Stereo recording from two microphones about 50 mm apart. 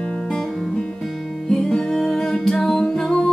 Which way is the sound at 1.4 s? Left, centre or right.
Centre.